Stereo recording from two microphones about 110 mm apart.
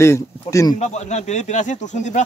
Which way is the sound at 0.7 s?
90° left.